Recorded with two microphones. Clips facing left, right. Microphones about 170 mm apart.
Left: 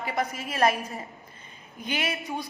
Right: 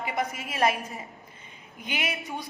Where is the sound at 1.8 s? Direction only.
15° right (ahead or behind).